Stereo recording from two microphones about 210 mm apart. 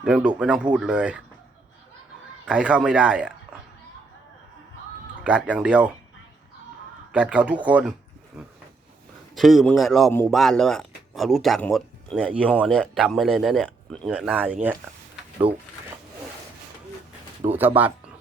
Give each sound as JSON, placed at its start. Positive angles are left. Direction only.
{"t": 0.0, "sound": "speech", "side_deg": -5}
{"t": 2.5, "sound": "speech", "side_deg": -5}
{"t": 5.2, "sound": "speech", "side_deg": -5}
{"t": 7.1, "sound": "speech", "side_deg": -5}
{"t": 9.3, "sound": "speech", "side_deg": 0}
{"t": 15.5, "sound": "speech", "side_deg": -25}
{"t": 17.4, "sound": "speech", "side_deg": -15}